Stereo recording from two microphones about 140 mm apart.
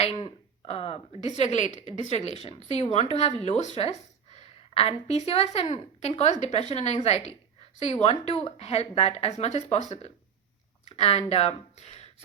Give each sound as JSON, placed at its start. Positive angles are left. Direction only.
{"t": 0.0, "sound": "a woman's voice", "side_deg": 40}
{"t": 10.8, "sound": "speech", "side_deg": 50}